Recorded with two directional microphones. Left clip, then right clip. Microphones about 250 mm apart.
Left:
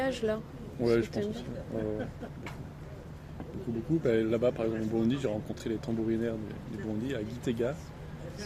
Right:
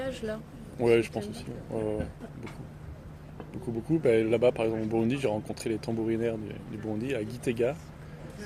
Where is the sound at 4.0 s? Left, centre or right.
Right.